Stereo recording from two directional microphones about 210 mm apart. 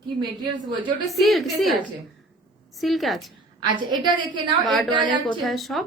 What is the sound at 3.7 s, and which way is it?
Speech, 20° right (ahead or behind).